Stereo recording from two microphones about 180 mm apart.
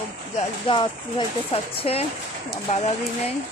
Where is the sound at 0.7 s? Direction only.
30° left (ahead or behind).